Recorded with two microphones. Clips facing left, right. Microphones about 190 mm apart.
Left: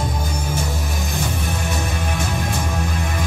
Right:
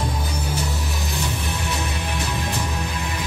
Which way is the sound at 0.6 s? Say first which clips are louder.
Left 2 dB; 50° left (ahead or behind).